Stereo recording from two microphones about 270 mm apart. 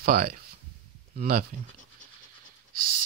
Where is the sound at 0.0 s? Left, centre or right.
Right.